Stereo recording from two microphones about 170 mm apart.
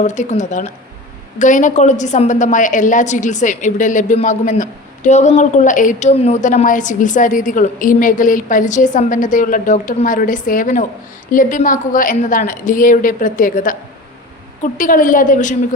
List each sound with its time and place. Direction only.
0.0 s a woman's voice: 45° left (ahead or behind)